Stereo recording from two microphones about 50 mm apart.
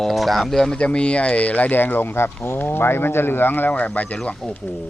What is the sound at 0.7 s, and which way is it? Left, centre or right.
Speech, left.